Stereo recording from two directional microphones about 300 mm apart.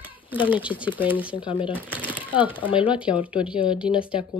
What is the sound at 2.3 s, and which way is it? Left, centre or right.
Speech, centre.